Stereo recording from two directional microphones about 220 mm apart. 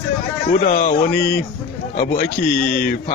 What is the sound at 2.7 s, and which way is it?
Speech, 45° left (ahead or behind).